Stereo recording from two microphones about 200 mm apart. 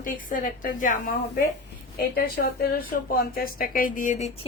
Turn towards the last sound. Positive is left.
turn(degrees=35)  # may be behind; listen again after turning